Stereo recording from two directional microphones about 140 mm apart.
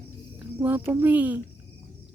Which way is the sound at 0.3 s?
15° right (ahead or behind).